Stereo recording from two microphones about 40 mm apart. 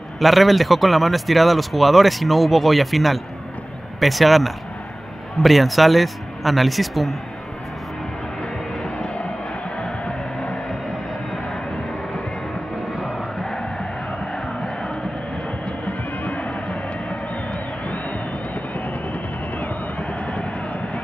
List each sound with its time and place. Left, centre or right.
0.2 s speech: centre
9.0 s music: left
13.0 s music: centre
14.3 s crowd: left
15.8 s music: left
19.1 s music: left